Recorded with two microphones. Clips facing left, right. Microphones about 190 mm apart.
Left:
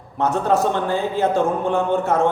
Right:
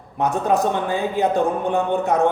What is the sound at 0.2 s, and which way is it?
A man's voice, 15° right (ahead or behind).